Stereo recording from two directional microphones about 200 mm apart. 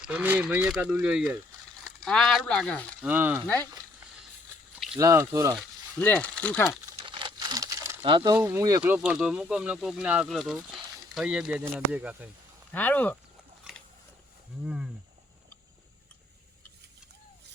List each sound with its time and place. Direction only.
0.0 s speech: 5° right (ahead or behind)
3.0 s speech: 10° right (ahead or behind)
3.4 s speech: 10° left (ahead or behind)
4.9 s speech: 15° right (ahead or behind)
6.0 s speech: 10° left (ahead or behind)
6.9 s crumpling: 25° right (ahead or behind)
8.4 s speech: 15° right (ahead or behind)
12.7 s speech: 10° left (ahead or behind)
14.6 s speech: 5° right (ahead or behind)